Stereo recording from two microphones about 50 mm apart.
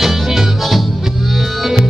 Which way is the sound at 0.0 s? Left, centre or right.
Centre.